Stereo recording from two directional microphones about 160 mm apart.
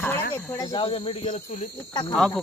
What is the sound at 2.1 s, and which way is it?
Speech, centre (ahead or behind).